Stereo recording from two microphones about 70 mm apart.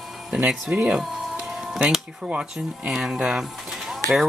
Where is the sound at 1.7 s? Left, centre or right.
Centre.